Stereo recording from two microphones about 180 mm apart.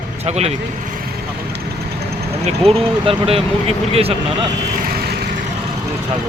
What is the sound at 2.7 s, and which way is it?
Speech, 30° right (ahead or behind).